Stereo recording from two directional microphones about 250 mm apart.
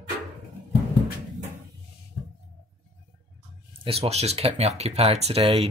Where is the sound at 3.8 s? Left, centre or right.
Right.